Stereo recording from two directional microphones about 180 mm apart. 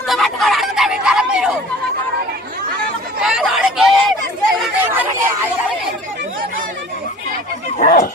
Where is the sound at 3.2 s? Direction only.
Centre (ahead or behind).